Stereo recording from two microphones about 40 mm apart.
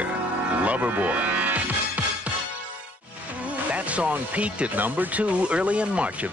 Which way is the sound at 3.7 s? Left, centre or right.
Right.